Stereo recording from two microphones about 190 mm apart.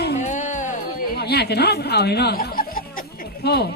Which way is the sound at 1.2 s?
60° left (ahead or behind).